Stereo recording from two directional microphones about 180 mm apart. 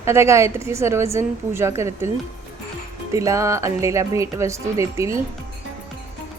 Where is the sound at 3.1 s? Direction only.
15° right (ahead or behind).